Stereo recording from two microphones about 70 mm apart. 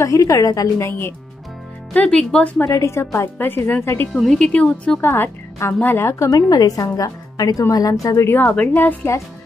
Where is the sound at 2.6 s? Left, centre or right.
Left.